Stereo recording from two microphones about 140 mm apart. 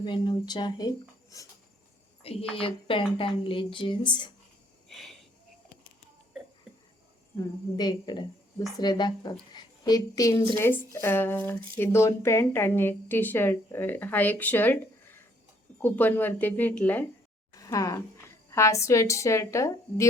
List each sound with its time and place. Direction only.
0.0 s a woman's voice: 35° left (ahead or behind)
2.2 s a woman's voice: 45° left (ahead or behind)
4.9 s a sound: centre (ahead or behind)
7.3 s a woman's voice: 30° left (ahead or behind); by 17.1 s 10° left (ahead or behind)
17.5 s a sound: 25° left (ahead or behind)
18.5 s a woman's voice: 20° left (ahead or behind)